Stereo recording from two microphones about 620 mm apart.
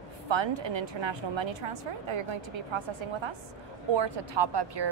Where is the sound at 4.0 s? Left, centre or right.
Right.